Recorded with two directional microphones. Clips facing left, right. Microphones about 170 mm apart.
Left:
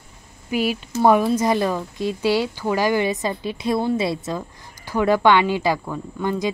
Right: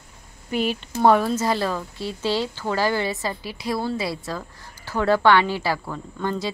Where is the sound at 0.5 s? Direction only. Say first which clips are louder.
Left 2 dB; 10° left (ahead or behind).